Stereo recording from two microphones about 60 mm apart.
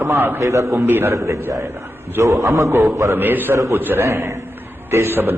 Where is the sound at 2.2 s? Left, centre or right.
Right.